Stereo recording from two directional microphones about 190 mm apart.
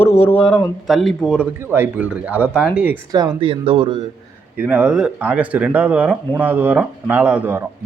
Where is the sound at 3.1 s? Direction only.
25° right (ahead or behind).